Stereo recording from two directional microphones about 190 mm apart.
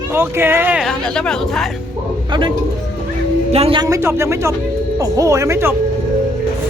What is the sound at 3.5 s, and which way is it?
Speech, 30° right (ahead or behind).